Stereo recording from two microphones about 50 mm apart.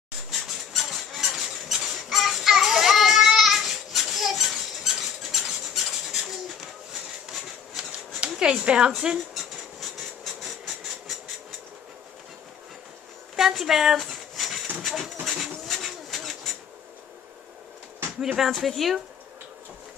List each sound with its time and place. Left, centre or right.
0.3 s squeak: centre
8.2 s dog: centre
8.6 s a woman's voice: centre
9.3 s train: centre
13.4 s a sound: centre
14.8 s speech: centre
15.2 s a sound: centre
18.2 s speech: centre